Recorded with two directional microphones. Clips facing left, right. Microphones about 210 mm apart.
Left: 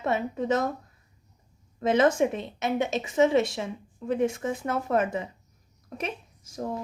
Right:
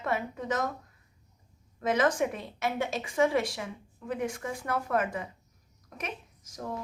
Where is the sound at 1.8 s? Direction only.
25° left (ahead or behind).